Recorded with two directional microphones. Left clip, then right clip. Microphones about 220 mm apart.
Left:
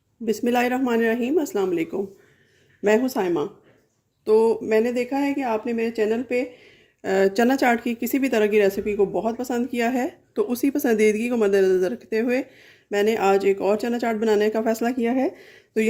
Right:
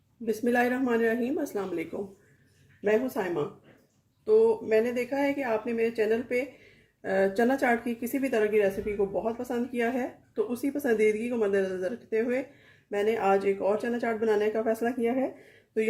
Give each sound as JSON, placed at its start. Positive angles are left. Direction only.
{"t": 0.3, "sound": "speech", "side_deg": 40}